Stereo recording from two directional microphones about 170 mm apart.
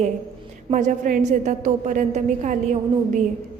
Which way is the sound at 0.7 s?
50° right (ahead or behind).